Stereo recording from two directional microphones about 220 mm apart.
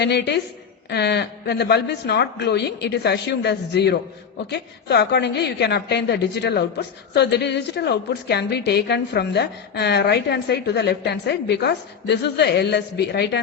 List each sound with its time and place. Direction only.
0.0 s a woman's voice: 50° left (ahead or behind)